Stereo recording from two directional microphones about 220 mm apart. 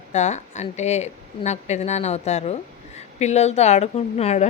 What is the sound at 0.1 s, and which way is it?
Speech, 30° left (ahead or behind).